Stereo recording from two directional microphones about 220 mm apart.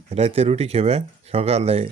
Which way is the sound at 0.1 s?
30° right (ahead or behind).